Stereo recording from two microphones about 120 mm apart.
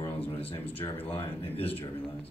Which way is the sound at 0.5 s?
15° left (ahead or behind).